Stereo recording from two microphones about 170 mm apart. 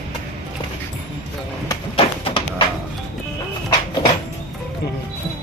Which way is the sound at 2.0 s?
30° left (ahead or behind).